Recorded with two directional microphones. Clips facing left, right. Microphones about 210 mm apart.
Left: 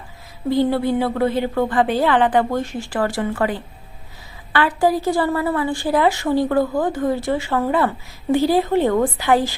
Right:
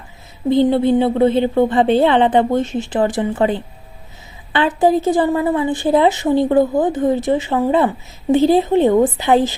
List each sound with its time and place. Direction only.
0.4 s a woman's voice: 20° right (ahead or behind)